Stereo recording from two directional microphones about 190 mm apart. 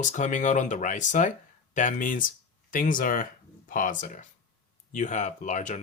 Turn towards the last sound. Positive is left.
turn(degrees=40)  # may be behind; listen again after turning